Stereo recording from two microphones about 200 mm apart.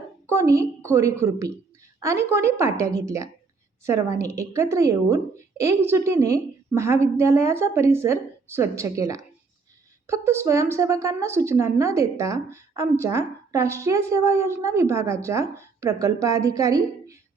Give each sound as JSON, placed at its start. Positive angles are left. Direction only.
{"t": 0.3, "sound": "a woman's voice", "side_deg": -15}